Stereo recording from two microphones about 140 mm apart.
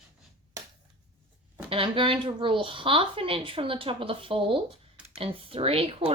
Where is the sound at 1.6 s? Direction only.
40° right (ahead or behind).